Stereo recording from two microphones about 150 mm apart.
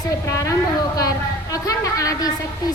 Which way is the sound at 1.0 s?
25° left (ahead or behind).